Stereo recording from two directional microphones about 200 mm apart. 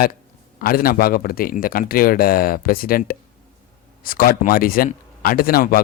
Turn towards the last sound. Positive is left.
turn(degrees=45)  # may be behind; listen again after turning